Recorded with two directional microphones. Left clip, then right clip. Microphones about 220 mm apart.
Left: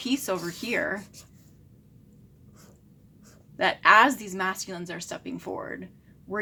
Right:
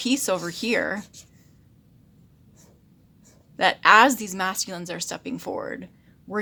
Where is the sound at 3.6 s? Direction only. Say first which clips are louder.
Right 3 dB; 45° right (ahead or behind).